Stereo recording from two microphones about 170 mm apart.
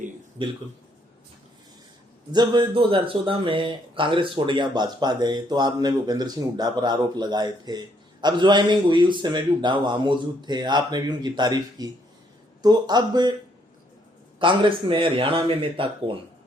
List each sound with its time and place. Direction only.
2.3 s speech: 25° right (ahead or behind)
14.3 s speech: 30° right (ahead or behind)